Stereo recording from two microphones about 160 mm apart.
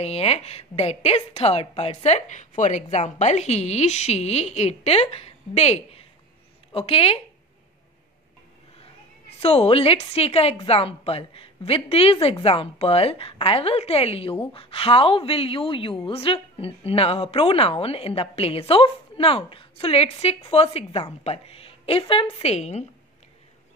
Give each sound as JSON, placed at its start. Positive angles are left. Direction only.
{"t": 0.0, "sound": "a woman's voice", "side_deg": 40}
{"t": 9.4, "sound": "a woman's voice", "side_deg": 40}